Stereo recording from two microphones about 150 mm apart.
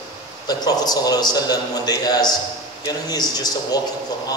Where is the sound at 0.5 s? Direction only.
25° left (ahead or behind).